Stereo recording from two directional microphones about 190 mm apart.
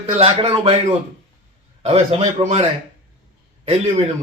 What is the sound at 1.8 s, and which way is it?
Speech, 30° right (ahead or behind).